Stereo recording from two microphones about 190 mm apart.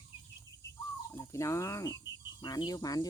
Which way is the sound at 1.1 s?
15° left (ahead or behind).